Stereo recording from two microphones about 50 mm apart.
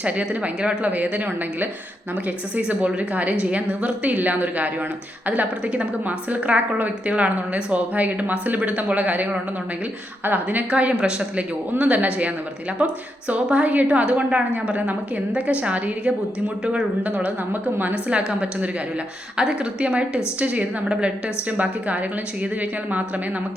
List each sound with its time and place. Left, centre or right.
0.0 s a woman's voice: right
10.7 s a woman's voice: right
17.5 s a woman's voice: right
18.3 s a woman's voice: right